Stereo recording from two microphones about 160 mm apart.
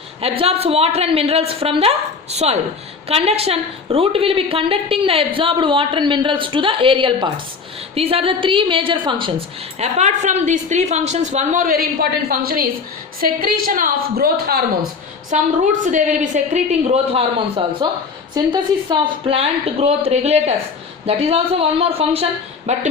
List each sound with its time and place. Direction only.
0.2 s a woman's voice: 40° right (ahead or behind)
9.7 s a woman's voice: 45° right (ahead or behind); by 14.8 s 70° right (ahead or behind)
15.3 s a woman's voice: 50° right (ahead or behind)